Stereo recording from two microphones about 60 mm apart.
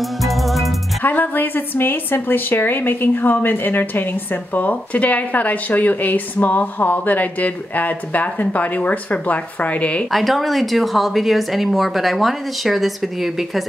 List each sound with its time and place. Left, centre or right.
0.2 s music: centre
1.0 s a woman's voice: left
10.1 s a woman's voice: centre